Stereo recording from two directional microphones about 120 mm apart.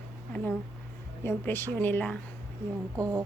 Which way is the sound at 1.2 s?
20° left (ahead or behind).